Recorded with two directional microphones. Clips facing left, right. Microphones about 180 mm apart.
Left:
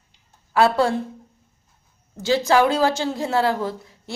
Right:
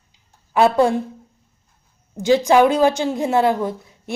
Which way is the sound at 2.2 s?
15° right (ahead or behind).